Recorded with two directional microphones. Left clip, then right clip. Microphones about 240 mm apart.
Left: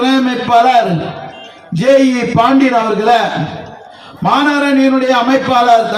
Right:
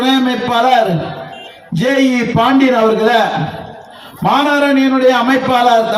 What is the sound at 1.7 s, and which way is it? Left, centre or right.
Speech, centre.